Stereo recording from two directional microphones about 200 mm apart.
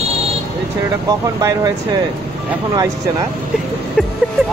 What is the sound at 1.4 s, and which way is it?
Speech, 15° right (ahead or behind).